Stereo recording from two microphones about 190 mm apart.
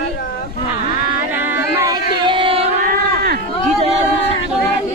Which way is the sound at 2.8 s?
50° right (ahead or behind).